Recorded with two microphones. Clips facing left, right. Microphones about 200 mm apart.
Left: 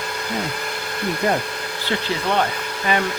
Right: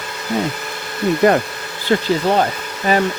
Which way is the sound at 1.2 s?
75° right (ahead or behind).